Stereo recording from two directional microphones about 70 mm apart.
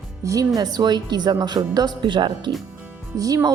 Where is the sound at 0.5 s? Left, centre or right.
Right.